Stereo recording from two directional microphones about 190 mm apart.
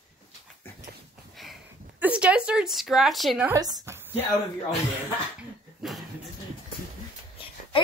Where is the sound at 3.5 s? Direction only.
20° right (ahead or behind).